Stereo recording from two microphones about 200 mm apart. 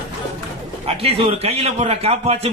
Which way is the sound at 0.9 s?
30° right (ahead or behind).